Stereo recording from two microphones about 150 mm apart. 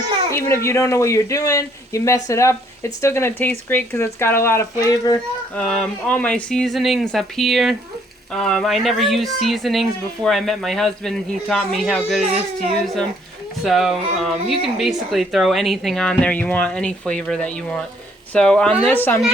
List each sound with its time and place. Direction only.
0.3 s speech: 20° left (ahead or behind)
5.5 s speech: 5° left (ahead or behind)